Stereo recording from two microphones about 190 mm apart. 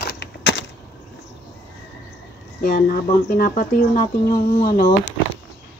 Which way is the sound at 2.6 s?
50° left (ahead or behind).